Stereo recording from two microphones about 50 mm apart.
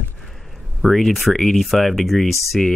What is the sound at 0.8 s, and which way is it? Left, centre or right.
Speech, centre.